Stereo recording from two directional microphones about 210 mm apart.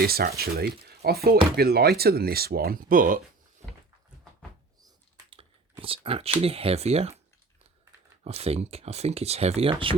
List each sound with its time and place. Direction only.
0.0 s speech: 45° right (ahead or behind)
5.8 s speech: 25° right (ahead or behind)
8.2 s speech: 30° right (ahead or behind)